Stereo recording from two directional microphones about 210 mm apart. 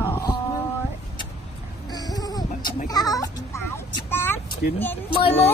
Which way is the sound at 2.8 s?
20° left (ahead or behind).